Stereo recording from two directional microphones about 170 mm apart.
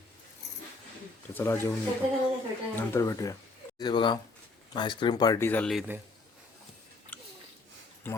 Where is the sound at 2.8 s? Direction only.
15° left (ahead or behind).